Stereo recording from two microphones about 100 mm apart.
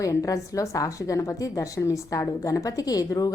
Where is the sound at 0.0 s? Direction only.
35° left (ahead or behind).